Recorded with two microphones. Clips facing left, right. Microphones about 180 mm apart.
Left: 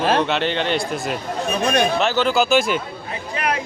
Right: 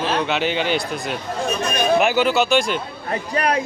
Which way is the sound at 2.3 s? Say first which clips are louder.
Left 1 dB; centre (ahead or behind).